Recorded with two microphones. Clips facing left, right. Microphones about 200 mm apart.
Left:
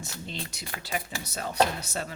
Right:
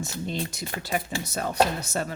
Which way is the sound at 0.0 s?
45° right (ahead or behind).